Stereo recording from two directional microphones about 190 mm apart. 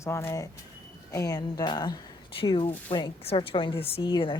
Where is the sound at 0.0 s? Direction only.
15° left (ahead or behind).